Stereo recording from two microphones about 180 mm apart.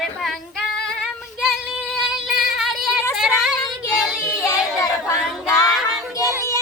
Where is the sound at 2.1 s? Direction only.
Centre (ahead or behind).